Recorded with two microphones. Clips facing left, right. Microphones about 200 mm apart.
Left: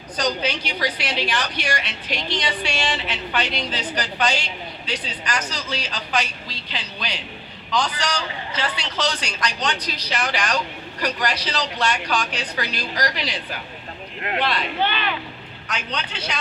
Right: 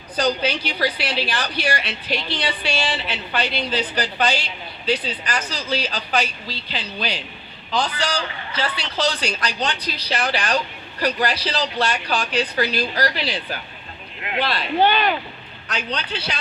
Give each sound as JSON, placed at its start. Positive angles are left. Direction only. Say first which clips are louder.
{"t": 0.2, "sound": "speech", "louder": "right 3 dB", "side_deg": -35}
{"t": 14.4, "sound": "speech", "louder": "right 6 dB", "side_deg": -35}